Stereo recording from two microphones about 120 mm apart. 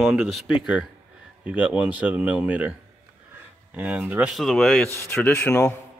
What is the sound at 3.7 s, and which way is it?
Speech, 10° right (ahead or behind).